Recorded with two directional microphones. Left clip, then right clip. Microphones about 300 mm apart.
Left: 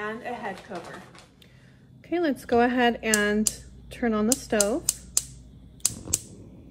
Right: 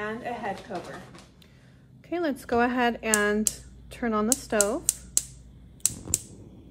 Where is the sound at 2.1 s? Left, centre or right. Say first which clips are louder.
Left 3 dB; centre.